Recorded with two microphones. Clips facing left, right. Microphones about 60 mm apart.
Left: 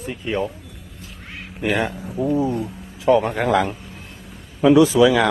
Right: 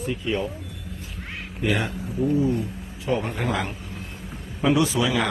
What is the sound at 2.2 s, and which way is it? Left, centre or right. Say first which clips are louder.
Speech: left 2 dB; left.